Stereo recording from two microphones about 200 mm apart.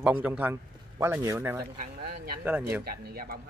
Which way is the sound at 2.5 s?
10° right (ahead or behind).